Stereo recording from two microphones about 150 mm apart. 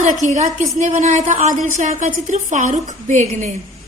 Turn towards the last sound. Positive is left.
turn(degrees=-55)  # may be behind; listen again after turning